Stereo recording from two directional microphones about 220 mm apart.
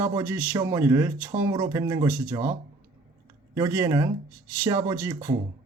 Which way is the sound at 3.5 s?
10° right (ahead or behind).